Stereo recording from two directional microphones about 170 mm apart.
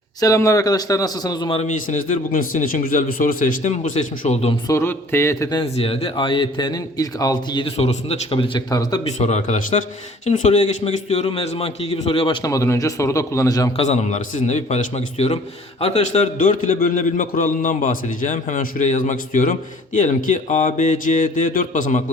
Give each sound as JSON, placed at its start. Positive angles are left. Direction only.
{"t": 0.2, "sound": "a man's voice", "side_deg": 20}
{"t": 1.6, "sound": "a man's voice", "side_deg": 50}
{"t": 4.7, "sound": "speech", "side_deg": 15}
{"t": 5.6, "sound": "a man's voice", "side_deg": 35}
{"t": 9.0, "sound": "a man's voice", "side_deg": 40}
{"t": 12.4, "sound": "a man's voice", "side_deg": 20}
{"t": 13.7, "sound": "a man's voice", "side_deg": 45}